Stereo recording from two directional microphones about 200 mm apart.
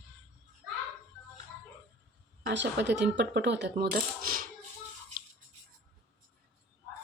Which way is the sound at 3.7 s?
45° right (ahead or behind).